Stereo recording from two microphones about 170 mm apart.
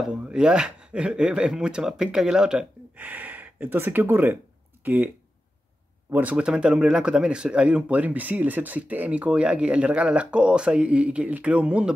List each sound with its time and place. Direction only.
0.1 s speech: 5° right (ahead or behind)